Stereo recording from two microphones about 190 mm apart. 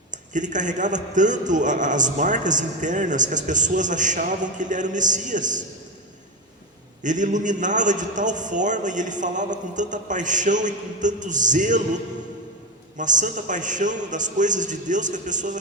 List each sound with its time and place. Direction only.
0.1 s a man's voice: 40° right (ahead or behind)
7.0 s a man's voice: 40° right (ahead or behind)
13.0 s a man's voice: 40° right (ahead or behind)